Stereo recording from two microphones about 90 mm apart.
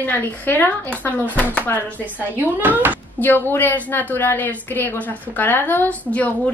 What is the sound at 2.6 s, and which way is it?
Speech, 20° right (ahead or behind).